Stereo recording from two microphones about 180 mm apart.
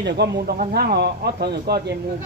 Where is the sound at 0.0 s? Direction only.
70° right (ahead or behind).